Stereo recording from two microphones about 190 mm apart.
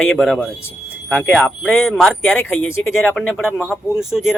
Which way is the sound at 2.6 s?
90° left.